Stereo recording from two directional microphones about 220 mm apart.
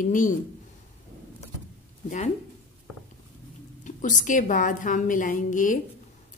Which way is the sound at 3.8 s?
35° left (ahead or behind).